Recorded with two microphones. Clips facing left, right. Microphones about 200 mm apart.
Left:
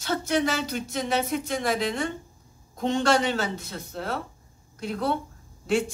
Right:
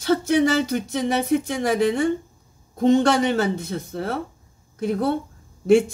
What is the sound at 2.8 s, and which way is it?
Speech, 55° right (ahead or behind).